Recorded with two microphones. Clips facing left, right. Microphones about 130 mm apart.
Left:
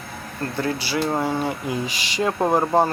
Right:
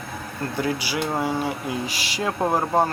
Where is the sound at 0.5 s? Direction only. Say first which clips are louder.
Left 1 dB; 15° right (ahead or behind).